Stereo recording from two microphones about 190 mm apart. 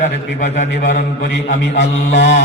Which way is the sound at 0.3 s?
40° left (ahead or behind).